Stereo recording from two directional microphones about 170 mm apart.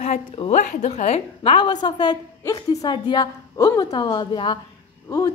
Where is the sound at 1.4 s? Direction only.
30° left (ahead or behind).